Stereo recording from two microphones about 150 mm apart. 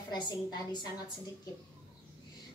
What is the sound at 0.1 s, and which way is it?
A woman's voice, 30° left (ahead or behind).